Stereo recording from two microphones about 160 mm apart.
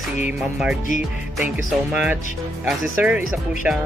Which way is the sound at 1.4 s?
5° right (ahead or behind).